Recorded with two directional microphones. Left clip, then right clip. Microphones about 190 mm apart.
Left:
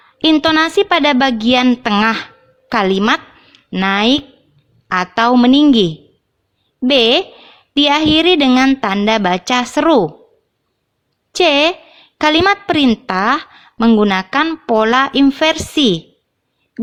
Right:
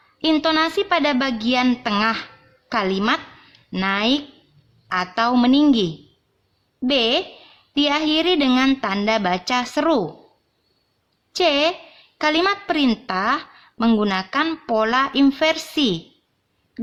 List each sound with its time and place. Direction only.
0.2 s a woman's voice: 35° left (ahead or behind)
11.3 s a woman's voice: 35° left (ahead or behind)